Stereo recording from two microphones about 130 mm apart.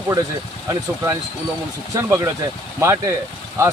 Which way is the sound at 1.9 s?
20° right (ahead or behind).